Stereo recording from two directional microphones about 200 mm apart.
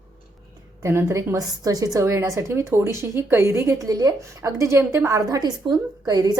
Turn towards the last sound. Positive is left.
turn(degrees=-20)  # may be behind; listen again after turning